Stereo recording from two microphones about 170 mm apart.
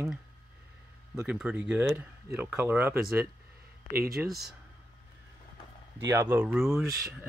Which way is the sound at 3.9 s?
60° right (ahead or behind).